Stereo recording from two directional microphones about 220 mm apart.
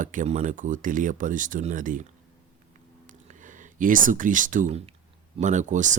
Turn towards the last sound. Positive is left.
turn(degrees=-35)  # may be behind; listen again after turning